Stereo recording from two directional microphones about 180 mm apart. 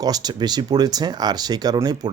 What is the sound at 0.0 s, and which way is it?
A man's voice, 20° right (ahead or behind).